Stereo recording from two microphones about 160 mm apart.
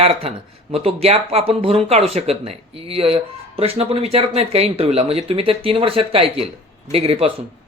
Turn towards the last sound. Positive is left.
turn(degrees=-35)  # may be behind; listen again after turning